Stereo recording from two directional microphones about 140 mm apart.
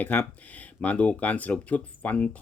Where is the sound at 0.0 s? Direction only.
10° left (ahead or behind).